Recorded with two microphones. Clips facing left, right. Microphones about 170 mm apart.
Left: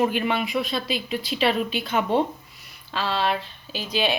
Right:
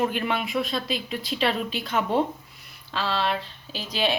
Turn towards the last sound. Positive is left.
turn(degrees=0)  # may be behind; listen again after turning